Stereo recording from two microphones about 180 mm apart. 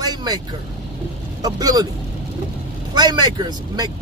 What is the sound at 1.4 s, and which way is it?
Speech, 20° right (ahead or behind).